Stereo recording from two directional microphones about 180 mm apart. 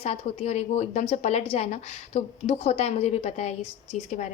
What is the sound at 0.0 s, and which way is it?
A woman's voice, 35° left (ahead or behind).